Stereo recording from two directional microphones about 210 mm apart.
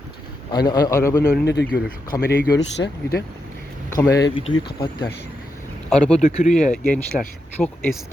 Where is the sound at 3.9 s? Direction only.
15° left (ahead or behind).